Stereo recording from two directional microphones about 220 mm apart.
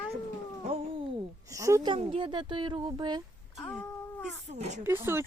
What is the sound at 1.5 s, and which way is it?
A woman's voice, 15° right (ahead or behind).